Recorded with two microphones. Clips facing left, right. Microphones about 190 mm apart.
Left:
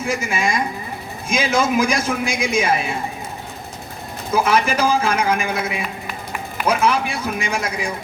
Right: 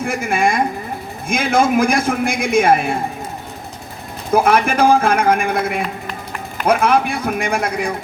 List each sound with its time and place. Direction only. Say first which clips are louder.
0.0 s a man's voice: right 4 dB; 55° right (ahead or behind)
4.3 s a man's voice: right 3 dB; 55° right (ahead or behind)